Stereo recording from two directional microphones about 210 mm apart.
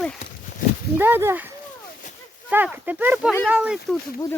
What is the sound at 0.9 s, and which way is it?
Speech, 10° right (ahead or behind).